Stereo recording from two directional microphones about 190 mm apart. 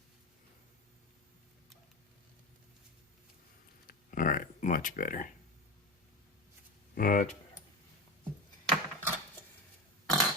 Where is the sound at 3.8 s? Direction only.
45° left (ahead or behind).